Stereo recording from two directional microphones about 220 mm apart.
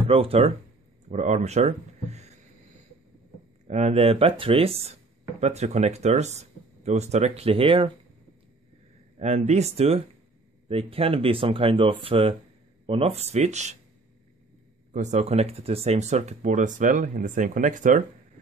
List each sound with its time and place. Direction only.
0.1 s speech: 25° right (ahead or behind)
3.6 s speech: 30° right (ahead or behind)
9.2 s speech: 30° right (ahead or behind)
14.9 s speech: 30° right (ahead or behind)